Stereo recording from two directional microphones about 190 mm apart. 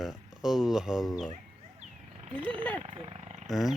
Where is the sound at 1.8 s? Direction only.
35° right (ahead or behind).